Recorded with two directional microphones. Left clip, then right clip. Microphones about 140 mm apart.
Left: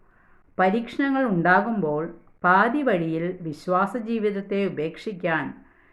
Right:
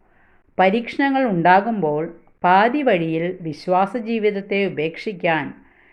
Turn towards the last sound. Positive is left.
turn(degrees=-15)  # may be behind; listen again after turning